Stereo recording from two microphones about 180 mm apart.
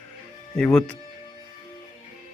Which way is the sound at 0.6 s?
10° left (ahead or behind).